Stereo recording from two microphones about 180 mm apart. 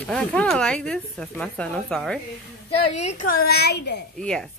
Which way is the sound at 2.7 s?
35° left (ahead or behind).